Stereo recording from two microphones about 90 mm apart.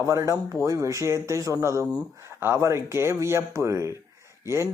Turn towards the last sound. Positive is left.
turn(degrees=-30)  # may be behind; listen again after turning